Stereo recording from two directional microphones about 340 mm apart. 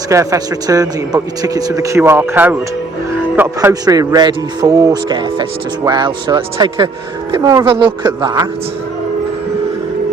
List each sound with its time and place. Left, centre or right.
0.1 s speech: centre